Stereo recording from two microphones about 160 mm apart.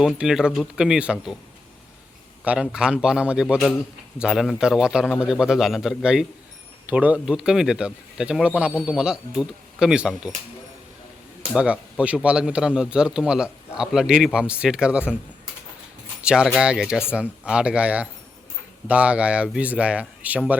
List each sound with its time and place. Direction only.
0.0 s speech: 5° right (ahead or behind)
2.4 s speech: 5° right (ahead or behind)
11.5 s speech: 5° right (ahead or behind)
16.2 s speech: 5° right (ahead or behind)